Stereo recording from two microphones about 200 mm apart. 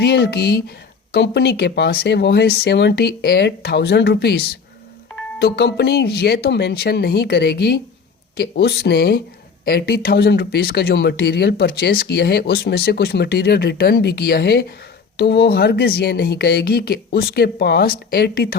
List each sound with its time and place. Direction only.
0.0 s speech: 55° left (ahead or behind)